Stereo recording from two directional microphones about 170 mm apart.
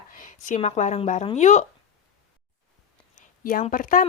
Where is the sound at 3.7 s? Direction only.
55° left (ahead or behind).